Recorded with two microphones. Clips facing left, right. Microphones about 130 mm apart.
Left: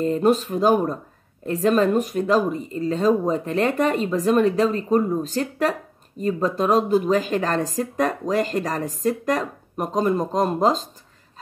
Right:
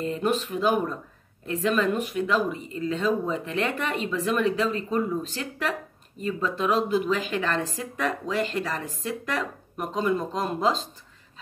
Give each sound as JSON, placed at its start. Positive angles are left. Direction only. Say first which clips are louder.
{"t": 0.0, "sound": "speech", "louder": "left 7 dB", "side_deg": 40}